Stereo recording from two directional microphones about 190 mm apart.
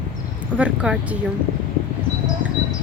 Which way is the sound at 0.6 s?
5° right (ahead or behind).